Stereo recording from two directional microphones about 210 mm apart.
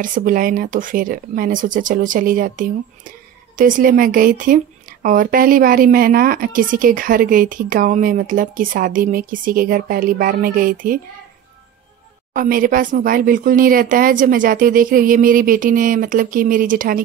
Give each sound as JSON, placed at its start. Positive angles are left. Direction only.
{"t": 0.0, "sound": "a woman's voice", "side_deg": -40}
{"t": 12.4, "sound": "a woman's voice", "side_deg": -40}